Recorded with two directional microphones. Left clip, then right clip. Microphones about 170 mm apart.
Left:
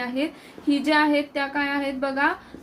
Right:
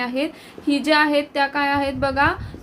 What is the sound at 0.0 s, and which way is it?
A woman's voice, 45° right (ahead or behind).